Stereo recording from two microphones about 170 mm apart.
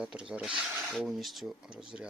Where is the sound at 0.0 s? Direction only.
5° right (ahead or behind).